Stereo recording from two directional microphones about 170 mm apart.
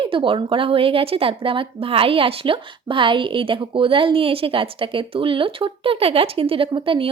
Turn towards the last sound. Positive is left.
turn(degrees=-30)  # may be behind; listen again after turning